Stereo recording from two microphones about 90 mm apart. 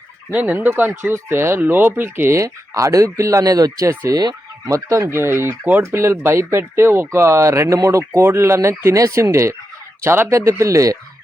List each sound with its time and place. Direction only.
0.3 s speech: 15° right (ahead or behind); by 4.7 s 45° right (ahead or behind)
4.7 s speech: 35° right (ahead or behind)